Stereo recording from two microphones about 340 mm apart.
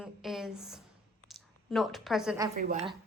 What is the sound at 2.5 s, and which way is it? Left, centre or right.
Speech, right.